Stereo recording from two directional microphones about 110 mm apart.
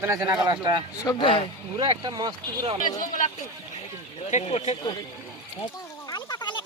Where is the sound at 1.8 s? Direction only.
35° right (ahead or behind).